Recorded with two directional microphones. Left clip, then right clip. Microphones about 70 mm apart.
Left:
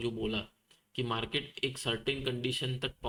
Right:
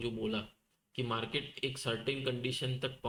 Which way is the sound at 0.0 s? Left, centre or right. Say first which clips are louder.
Left 2 dB; left.